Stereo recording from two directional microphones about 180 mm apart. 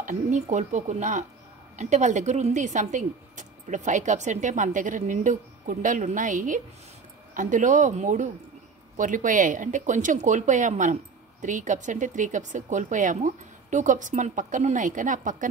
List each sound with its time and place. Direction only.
0.0 s speech: 40° right (ahead or behind)